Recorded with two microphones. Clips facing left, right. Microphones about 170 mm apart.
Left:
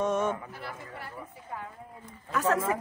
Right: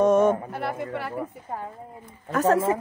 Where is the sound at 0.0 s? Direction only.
40° right (ahead or behind).